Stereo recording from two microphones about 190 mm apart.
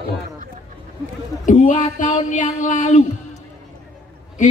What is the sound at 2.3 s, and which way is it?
Speech, 40° left (ahead or behind).